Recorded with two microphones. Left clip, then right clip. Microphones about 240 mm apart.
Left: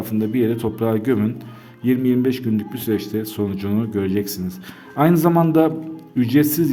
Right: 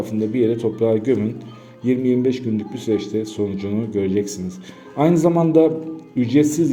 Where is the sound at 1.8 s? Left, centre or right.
Left.